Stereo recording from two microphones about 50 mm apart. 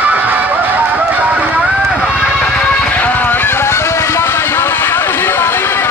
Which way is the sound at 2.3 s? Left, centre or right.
Centre.